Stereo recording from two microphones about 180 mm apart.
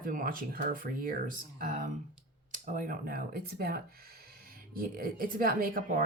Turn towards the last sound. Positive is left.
turn(degrees=-55)  # may be behind; listen again after turning